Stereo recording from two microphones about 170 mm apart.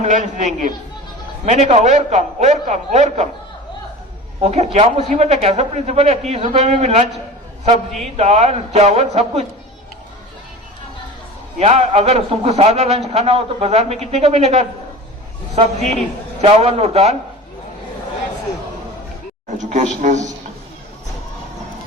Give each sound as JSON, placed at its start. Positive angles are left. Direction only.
{"t": 0.0, "sound": "a man's voice", "side_deg": -45}
{"t": 4.4, "sound": "a man's voice", "side_deg": -40}
{"t": 8.1, "sound": "a man's voice", "side_deg": -40}
{"t": 11.6, "sound": "a man's voice", "side_deg": -40}
{"t": 19.5, "sound": "a man's voice", "side_deg": -45}